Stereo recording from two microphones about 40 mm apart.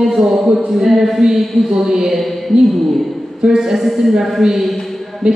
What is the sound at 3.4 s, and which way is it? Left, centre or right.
A woman's voice, centre.